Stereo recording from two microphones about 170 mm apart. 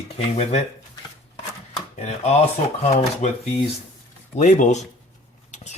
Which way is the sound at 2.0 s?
40° left (ahead or behind).